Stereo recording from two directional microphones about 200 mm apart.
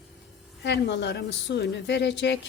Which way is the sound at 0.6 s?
60° left (ahead or behind).